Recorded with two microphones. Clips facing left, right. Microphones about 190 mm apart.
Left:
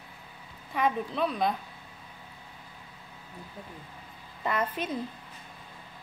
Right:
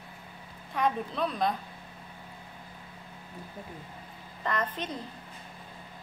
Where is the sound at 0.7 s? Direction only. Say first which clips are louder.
Left 1 dB; centre (ahead or behind).